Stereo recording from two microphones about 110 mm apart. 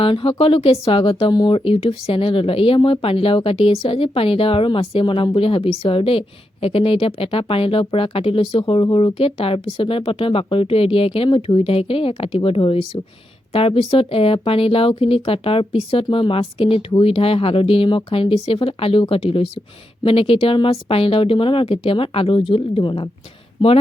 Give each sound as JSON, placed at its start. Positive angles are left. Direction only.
{"t": 0.0, "sound": "a woman's voice", "side_deg": 55}
{"t": 1.3, "sound": "a woman's voice", "side_deg": 45}
{"t": 16.0, "sound": "speech", "side_deg": 40}
{"t": 16.3, "sound": "a woman's voice", "side_deg": 55}